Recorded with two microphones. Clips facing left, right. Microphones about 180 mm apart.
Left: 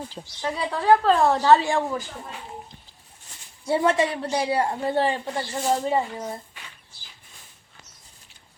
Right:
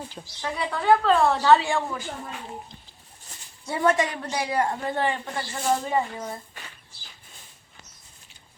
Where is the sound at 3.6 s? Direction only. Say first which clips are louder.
Left 2 dB; 30° left (ahead or behind).